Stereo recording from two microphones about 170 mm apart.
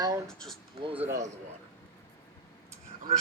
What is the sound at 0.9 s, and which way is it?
Speech, 15° right (ahead or behind).